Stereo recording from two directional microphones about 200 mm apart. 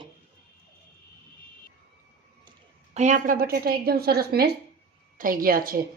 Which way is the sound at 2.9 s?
40° right (ahead or behind).